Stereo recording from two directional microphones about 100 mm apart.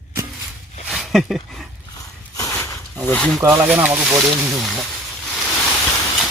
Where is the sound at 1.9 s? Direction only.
35° left (ahead or behind).